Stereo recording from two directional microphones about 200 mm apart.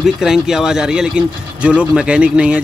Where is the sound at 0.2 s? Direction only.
Centre (ahead or behind).